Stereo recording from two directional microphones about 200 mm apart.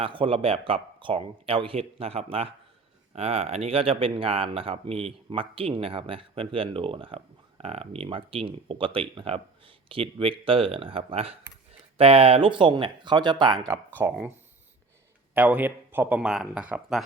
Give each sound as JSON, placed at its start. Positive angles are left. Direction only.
{"t": 0.0, "sound": "speech", "side_deg": -25}
{"t": 14.0, "sound": "speech", "side_deg": -10}
{"t": 15.4, "sound": "speech", "side_deg": -10}